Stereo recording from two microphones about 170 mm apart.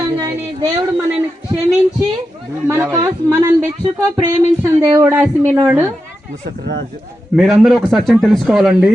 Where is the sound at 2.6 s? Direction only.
15° right (ahead or behind).